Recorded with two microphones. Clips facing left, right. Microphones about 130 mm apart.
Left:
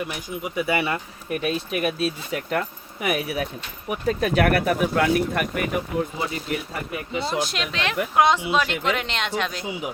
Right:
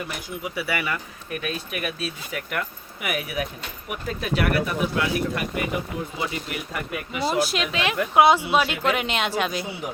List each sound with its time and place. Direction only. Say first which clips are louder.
0.4 s speech: left 4 dB; 20° left (ahead or behind); by 5.6 s 55° left (ahead or behind)
6.3 s speech: left 2 dB; 30° left (ahead or behind)
7.3 s speech: right 6 dB; 5° right (ahead or behind)